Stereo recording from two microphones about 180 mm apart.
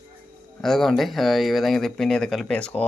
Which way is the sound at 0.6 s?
Centre (ahead or behind).